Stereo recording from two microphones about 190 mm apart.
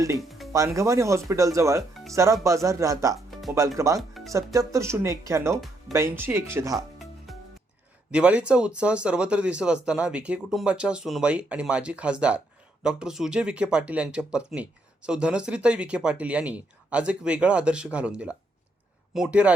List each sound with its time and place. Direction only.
0.2 s music: centre (ahead or behind)
0.5 s speech: 15° right (ahead or behind)
3.2 s music: centre (ahead or behind)
3.8 s speech: 15° right (ahead or behind)
6.7 s music: centre (ahead or behind)
8.1 s speech: 5° right (ahead or behind)